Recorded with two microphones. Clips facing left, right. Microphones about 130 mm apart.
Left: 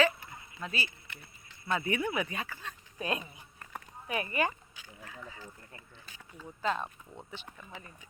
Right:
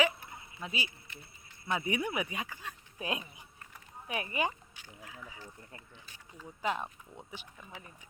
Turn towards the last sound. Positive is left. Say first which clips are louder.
# left 2 dB
turn(degrees=-10)  # may be behind; listen again after turning